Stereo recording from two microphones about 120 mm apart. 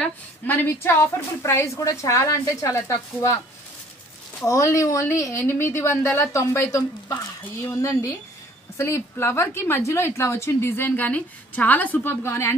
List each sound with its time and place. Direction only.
0.0 s a woman's voice: 15° left (ahead or behind)
4.5 s a woman's voice: 25° left (ahead or behind)